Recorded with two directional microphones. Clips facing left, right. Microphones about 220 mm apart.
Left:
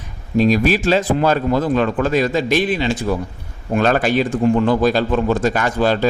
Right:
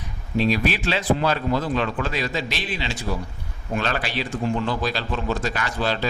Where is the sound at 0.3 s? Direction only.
45° left (ahead or behind).